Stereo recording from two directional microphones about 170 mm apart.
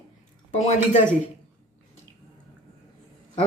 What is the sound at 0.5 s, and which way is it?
Speech, 40° left (ahead or behind).